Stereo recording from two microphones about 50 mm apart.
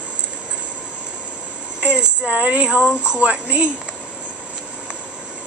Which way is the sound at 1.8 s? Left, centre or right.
Right.